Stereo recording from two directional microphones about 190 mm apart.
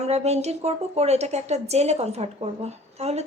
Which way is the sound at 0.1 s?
35° right (ahead or behind).